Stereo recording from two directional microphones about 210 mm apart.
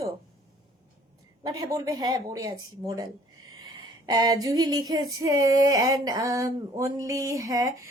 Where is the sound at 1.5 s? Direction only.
15° right (ahead or behind).